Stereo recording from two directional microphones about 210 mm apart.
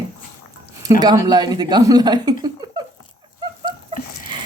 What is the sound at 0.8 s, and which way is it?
Speech, 20° right (ahead or behind).